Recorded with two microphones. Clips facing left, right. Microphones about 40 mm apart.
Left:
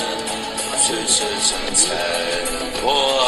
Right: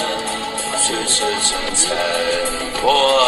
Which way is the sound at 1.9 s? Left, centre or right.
Right.